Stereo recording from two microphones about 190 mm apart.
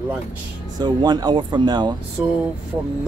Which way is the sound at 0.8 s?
20° right (ahead or behind).